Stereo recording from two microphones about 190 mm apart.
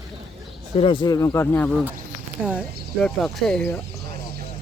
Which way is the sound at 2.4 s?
5° right (ahead or behind).